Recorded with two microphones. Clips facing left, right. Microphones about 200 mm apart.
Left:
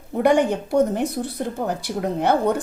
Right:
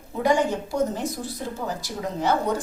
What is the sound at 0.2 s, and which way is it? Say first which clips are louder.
A woman's voice: left 4 dB; 60° left (ahead or behind).